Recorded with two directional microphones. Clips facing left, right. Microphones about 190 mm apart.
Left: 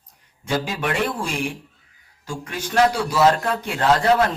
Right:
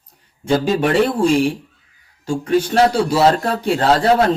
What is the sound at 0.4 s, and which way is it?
Speech, 30° right (ahead or behind).